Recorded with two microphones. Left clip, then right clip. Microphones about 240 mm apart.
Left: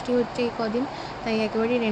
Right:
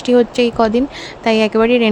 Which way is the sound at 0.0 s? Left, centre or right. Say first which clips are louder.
Right 12 dB; right.